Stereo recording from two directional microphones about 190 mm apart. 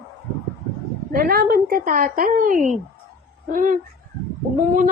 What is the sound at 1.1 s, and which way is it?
A woman's voice, 50° right (ahead or behind).